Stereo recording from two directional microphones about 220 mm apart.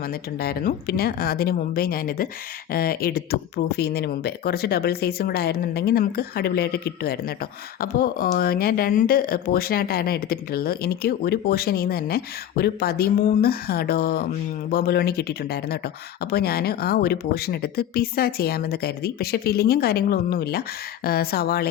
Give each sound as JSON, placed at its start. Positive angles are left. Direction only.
{"t": 0.0, "sound": "speech", "side_deg": 45}